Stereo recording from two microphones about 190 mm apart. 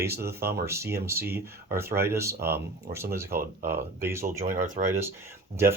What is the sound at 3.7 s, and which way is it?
Speech, 10° right (ahead or behind).